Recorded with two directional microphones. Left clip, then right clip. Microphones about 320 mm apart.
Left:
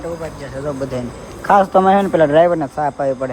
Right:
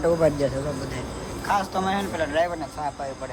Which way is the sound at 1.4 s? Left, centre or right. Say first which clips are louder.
Left 13 dB; centre.